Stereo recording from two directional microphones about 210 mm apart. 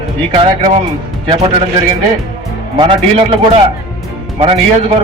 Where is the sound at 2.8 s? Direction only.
25° right (ahead or behind).